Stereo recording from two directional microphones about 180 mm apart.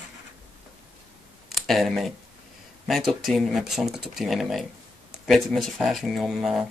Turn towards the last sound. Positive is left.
turn(degrees=0)  # may be behind; listen again after turning